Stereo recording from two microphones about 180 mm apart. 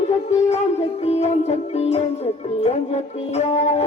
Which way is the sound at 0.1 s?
40° left (ahead or behind).